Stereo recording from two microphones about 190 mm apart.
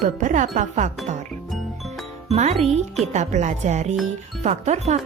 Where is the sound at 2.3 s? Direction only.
35° right (ahead or behind).